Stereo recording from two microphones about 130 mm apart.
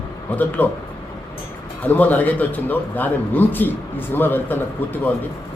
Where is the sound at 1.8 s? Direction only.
15° left (ahead or behind).